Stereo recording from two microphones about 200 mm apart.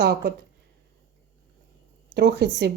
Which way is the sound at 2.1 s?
55° right (ahead or behind).